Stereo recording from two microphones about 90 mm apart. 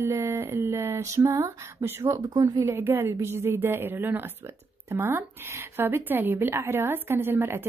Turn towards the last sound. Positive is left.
turn(degrees=-25)  # may be behind; listen again after turning